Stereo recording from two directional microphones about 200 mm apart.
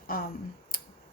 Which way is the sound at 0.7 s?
45° left (ahead or behind).